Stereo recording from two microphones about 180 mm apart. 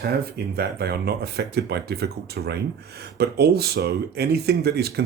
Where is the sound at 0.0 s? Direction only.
60° right (ahead or behind).